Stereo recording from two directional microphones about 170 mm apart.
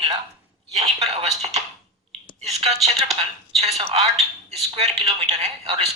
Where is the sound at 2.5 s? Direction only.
40° right (ahead or behind).